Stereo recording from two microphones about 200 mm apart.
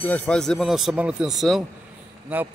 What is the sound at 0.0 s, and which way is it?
A man's voice, 5° left (ahead or behind).